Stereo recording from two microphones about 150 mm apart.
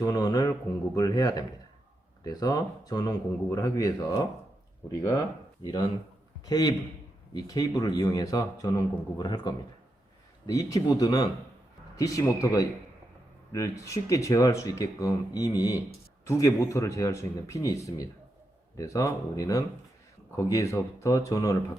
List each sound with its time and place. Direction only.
0.0 s speech: 25° left (ahead or behind)
5.6 s a man's voice: 25° left (ahead or behind)